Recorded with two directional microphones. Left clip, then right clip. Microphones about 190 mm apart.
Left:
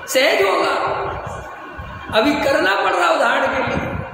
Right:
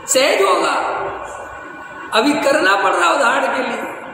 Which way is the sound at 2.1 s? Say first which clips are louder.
Right 1 dB; 10° right (ahead or behind).